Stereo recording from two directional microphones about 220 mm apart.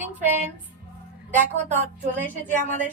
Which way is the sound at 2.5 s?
35° right (ahead or behind).